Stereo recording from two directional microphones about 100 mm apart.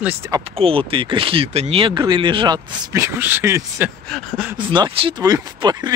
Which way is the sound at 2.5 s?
35° right (ahead or behind).